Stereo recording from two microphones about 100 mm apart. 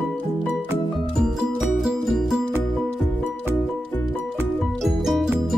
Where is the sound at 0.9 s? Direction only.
Centre (ahead or behind).